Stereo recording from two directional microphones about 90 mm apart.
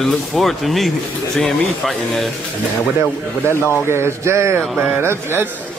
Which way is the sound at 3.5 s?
30° left (ahead or behind).